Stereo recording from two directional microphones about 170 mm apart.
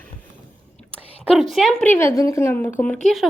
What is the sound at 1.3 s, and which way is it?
A woman's voice, centre (ahead or behind).